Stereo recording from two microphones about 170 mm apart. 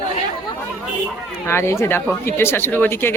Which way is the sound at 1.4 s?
15° left (ahead or behind).